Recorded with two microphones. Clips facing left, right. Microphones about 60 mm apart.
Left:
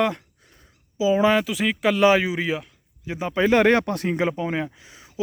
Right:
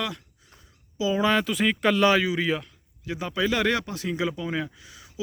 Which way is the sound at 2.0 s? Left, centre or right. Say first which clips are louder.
Left 5 dB; left.